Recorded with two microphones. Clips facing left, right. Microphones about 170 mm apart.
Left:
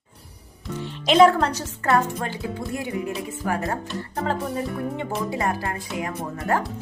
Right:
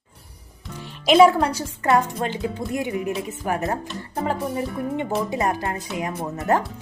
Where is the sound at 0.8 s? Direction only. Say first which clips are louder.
Right 1 dB; 10° right (ahead or behind).